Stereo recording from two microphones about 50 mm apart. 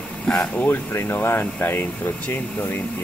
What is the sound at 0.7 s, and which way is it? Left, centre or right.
Speech, left.